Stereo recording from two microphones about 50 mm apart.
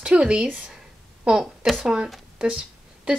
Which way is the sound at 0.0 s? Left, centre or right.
Centre.